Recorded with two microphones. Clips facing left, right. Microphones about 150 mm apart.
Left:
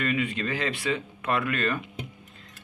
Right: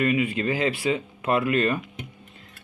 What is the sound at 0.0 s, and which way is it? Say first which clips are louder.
Speech: right 5 dB; 25° right (ahead or behind).